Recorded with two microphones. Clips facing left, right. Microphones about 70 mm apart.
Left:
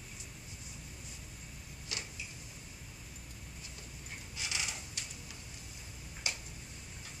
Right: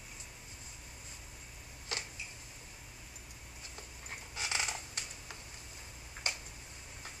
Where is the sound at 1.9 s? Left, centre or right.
Right.